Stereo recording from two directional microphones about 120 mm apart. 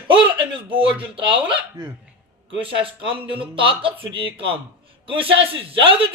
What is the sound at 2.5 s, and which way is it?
A woman's voice, 50° right (ahead or behind).